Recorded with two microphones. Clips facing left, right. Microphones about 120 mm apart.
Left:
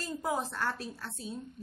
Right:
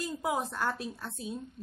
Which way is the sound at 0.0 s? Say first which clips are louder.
Right 1 dB; 15° right (ahead or behind).